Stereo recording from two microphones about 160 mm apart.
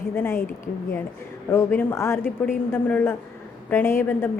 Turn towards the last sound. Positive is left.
turn(degrees=15)  # may be behind; listen again after turning